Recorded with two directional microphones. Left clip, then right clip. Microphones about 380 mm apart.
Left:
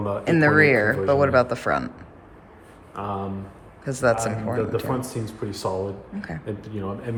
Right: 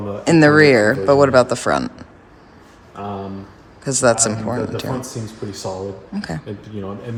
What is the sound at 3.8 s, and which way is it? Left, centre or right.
Speech, centre.